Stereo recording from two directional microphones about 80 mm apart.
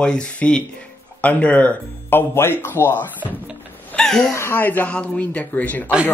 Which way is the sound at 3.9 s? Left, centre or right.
Centre.